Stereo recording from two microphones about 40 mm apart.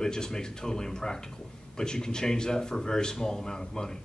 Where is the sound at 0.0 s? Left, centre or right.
Centre.